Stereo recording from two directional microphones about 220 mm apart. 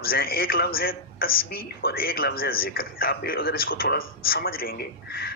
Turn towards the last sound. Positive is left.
turn(degrees=45)  # may be behind; listen again after turning